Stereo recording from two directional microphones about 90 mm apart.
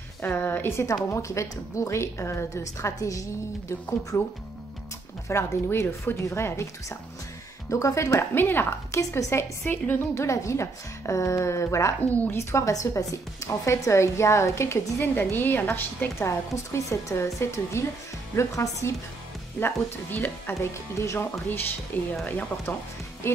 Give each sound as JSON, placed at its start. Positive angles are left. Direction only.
{"t": 0.2, "sound": "a woman's voice", "side_deg": 20}
{"t": 5.3, "sound": "a woman's voice", "side_deg": 30}
{"t": 12.1, "sound": "a woman's voice", "side_deg": 20}
{"t": 12.4, "sound": "a woman's voice", "side_deg": 30}
{"t": 16.3, "sound": "a woman's voice", "side_deg": 35}
{"t": 19.6, "sound": "a woman's voice", "side_deg": 25}
{"t": 20.7, "sound": "a woman's voice", "side_deg": 35}
{"t": 21.9, "sound": "a woman's voice", "side_deg": 20}
{"t": 23.2, "sound": "a woman's voice", "side_deg": 25}